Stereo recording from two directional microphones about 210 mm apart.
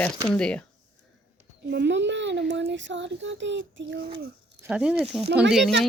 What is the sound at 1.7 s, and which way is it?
A child's voice, 55° right (ahead or behind).